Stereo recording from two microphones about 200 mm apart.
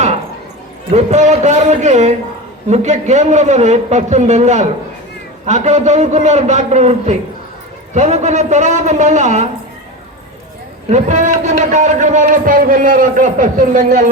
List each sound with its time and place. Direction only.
0.9 s a man's voice: 35° right (ahead or behind)
10.8 s a man's voice: 35° right (ahead or behind)